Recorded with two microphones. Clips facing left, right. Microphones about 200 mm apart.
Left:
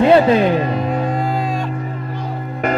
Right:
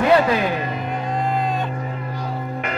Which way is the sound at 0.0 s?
25° left (ahead or behind).